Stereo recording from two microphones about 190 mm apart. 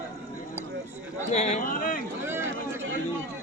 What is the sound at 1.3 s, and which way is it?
Speech, 35° left (ahead or behind).